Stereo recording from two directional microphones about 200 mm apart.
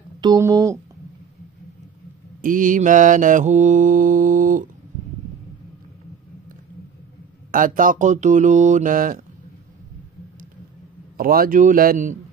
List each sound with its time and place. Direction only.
0.2 s speech: 20° right (ahead or behind)
2.4 s mantra: 40° right (ahead or behind)
7.5 s mantra: 45° right (ahead or behind)
11.1 s a man's voice: 45° right (ahead or behind)